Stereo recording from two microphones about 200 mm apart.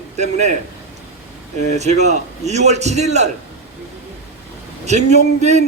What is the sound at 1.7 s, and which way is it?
Speech, 35° right (ahead or behind).